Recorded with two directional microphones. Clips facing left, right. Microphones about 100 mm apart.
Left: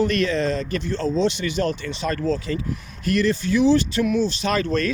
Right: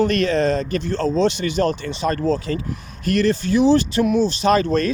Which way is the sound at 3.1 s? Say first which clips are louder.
Right 2 dB; 60° right (ahead or behind).